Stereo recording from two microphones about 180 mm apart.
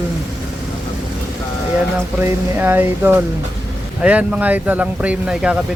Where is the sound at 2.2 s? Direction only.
10° right (ahead or behind).